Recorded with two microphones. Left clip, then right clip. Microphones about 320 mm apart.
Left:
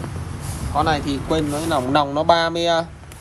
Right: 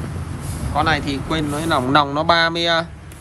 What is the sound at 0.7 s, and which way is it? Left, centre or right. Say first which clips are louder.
Speech: right 1 dB; centre.